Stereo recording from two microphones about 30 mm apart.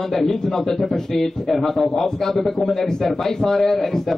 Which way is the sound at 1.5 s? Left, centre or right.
Centre.